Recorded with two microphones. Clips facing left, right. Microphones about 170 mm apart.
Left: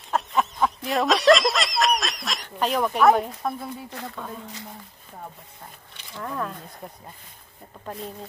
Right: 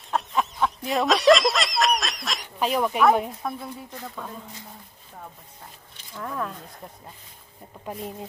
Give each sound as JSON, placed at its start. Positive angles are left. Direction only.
{"t": 0.1, "sound": "snicker", "side_deg": 0}
{"t": 3.9, "sound": "speech", "side_deg": 70}
{"t": 6.1, "sound": "speech", "side_deg": 0}
{"t": 7.9, "sound": "speech", "side_deg": -10}